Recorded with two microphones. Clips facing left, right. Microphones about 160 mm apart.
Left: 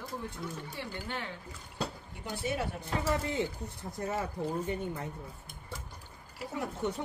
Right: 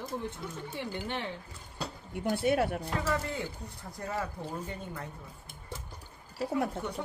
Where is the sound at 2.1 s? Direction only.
60° right (ahead or behind).